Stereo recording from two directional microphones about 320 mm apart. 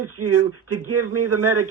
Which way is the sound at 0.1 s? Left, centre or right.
Right.